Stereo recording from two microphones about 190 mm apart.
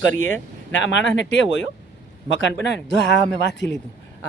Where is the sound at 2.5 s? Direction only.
65° left (ahead or behind).